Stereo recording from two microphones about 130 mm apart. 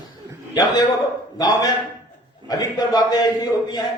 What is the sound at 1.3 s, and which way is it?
A man's voice, 30° left (ahead or behind).